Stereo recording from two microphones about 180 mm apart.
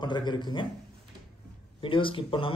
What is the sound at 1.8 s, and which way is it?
Speech, 30° left (ahead or behind).